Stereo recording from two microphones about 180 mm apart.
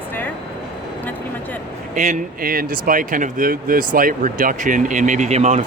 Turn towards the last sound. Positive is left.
turn(degrees=-40)  # may be behind; listen again after turning